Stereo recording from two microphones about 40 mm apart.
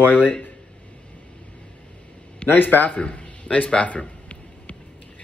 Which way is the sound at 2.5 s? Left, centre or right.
Left.